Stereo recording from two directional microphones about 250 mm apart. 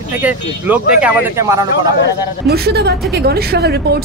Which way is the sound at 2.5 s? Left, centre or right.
Right.